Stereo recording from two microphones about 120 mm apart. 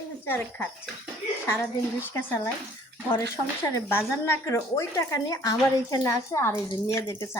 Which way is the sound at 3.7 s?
20° left (ahead or behind).